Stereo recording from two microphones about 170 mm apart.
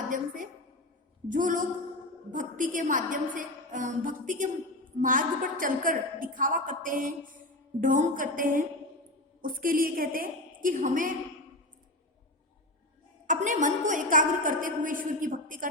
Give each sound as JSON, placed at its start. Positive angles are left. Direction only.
{"t": 1.3, "sound": "a woman's voice", "side_deg": -50}
{"t": 13.2, "sound": "a woman's voice", "side_deg": -50}